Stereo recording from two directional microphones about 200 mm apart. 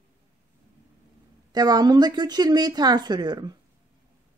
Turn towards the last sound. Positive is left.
turn(degrees=-20)  # may be behind; listen again after turning